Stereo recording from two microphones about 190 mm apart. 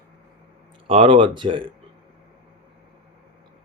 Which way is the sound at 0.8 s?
30° right (ahead or behind).